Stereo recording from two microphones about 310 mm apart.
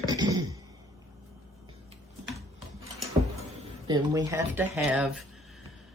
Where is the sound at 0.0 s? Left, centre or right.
Centre.